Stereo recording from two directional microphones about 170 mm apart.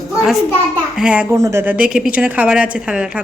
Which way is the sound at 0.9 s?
5° right (ahead or behind).